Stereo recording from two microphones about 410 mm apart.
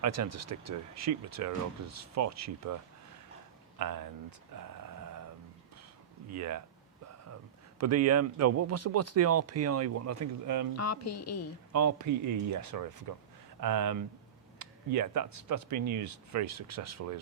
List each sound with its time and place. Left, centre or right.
0.0 s speech: right
3.8 s speech: right
4.5 s a sound: right
6.3 s speech: right
7.8 s speech: right
10.8 s speech: left
11.7 s speech: right